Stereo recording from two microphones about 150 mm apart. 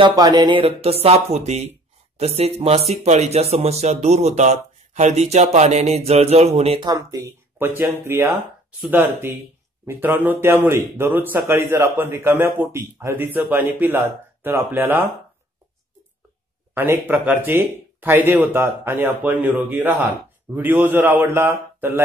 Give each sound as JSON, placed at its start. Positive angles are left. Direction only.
{"t": 0.0, "sound": "speech", "side_deg": -25}
{"t": 6.8, "sound": "a man's voice", "side_deg": -25}
{"t": 16.7, "sound": "a man's voice", "side_deg": -15}